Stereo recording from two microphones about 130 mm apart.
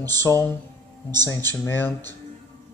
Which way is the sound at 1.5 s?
15° left (ahead or behind).